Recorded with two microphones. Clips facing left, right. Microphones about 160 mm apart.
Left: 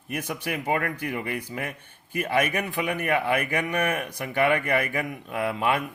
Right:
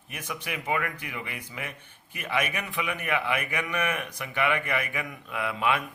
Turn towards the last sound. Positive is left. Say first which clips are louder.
# left 3 dB
turn(degrees=40)  # may be behind; listen again after turning